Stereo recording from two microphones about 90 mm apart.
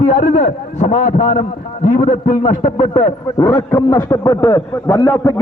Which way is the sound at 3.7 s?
40° left (ahead or behind).